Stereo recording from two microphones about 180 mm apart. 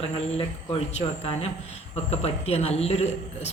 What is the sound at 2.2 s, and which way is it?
A woman's voice, 35° left (ahead or behind).